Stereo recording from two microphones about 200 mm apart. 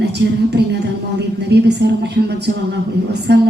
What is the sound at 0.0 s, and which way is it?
A woman's voice, 55° right (ahead or behind).